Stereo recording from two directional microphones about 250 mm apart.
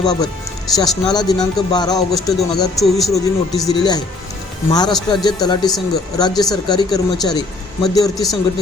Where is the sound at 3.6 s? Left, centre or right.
Centre.